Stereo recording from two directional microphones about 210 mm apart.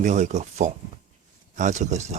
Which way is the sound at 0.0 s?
35° right (ahead or behind).